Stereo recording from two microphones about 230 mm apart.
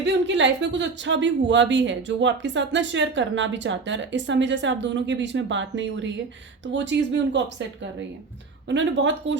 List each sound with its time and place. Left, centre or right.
0.0 s speech: right
8.7 s speech: right